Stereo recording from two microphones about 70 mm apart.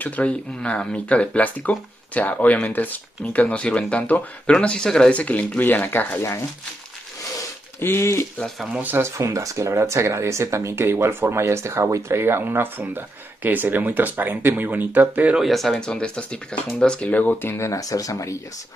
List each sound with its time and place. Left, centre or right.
0.0 s speech: centre
7.8 s speech: left
8.8 s speech: right
9.2 s speech: right
15.3 s speech: centre
15.8 s speech: centre; by 18.4 s left